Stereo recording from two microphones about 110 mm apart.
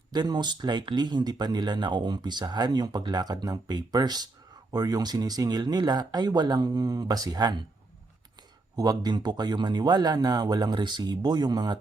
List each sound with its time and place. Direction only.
0.1 s speech: 40° right (ahead or behind)
8.7 s speech: 35° right (ahead or behind)